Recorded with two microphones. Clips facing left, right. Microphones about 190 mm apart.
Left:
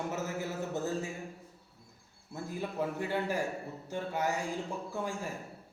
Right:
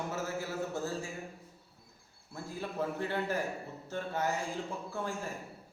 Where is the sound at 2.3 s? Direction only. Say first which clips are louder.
Left 2 dB; 15° left (ahead or behind).